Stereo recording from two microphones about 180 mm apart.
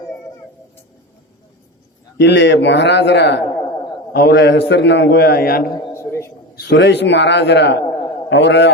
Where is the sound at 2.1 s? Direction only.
75° left (ahead or behind); by 5.6 s 55° left (ahead or behind).